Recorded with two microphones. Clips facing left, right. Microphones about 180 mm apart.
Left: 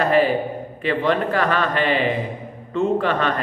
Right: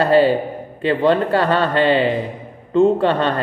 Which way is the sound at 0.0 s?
30° right (ahead or behind).